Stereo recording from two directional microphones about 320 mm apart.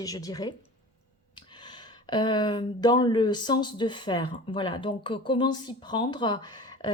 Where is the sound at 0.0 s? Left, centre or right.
Centre.